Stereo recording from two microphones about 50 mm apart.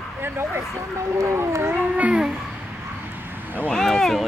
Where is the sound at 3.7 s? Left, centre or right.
Centre.